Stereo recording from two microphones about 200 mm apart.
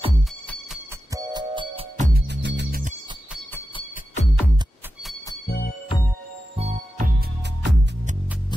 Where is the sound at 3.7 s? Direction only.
35° left (ahead or behind).